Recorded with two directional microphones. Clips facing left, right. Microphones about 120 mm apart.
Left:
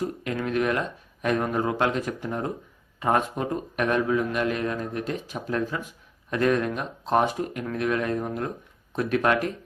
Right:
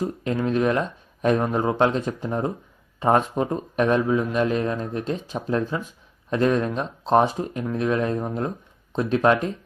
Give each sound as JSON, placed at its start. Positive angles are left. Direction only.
{"t": 0.0, "sound": "speech", "side_deg": -25}